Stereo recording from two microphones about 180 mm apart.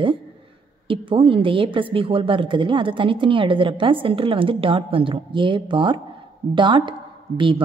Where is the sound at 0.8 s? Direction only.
30° right (ahead or behind).